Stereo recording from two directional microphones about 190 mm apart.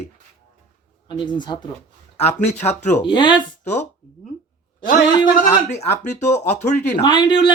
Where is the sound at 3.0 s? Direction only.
25° left (ahead or behind).